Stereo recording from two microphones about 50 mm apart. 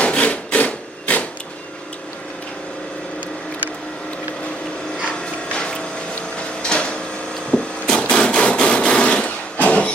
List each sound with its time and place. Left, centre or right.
0.0 s rub: left
5.2 s music: centre
6.6 s a sound: centre
7.5 s hammer: centre